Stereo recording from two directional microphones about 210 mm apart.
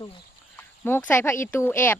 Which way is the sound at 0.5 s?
10° left (ahead or behind).